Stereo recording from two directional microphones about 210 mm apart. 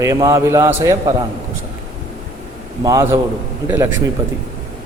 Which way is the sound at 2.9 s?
10° right (ahead or behind).